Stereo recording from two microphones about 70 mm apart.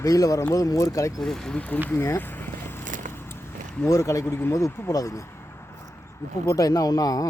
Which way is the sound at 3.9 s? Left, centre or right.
Left.